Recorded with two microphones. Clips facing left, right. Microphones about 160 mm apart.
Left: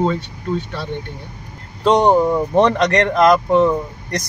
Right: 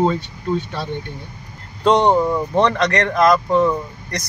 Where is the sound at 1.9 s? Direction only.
15° left (ahead or behind).